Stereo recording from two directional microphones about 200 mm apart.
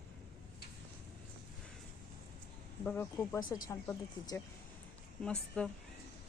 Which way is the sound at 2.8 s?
10° left (ahead or behind).